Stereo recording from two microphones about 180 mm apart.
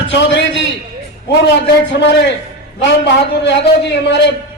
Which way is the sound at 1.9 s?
75° left (ahead or behind).